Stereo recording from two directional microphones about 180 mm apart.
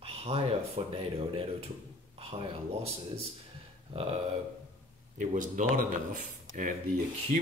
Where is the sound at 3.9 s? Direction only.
35° right (ahead or behind).